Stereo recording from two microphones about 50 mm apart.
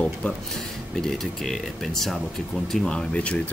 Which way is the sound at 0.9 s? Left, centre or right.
Centre.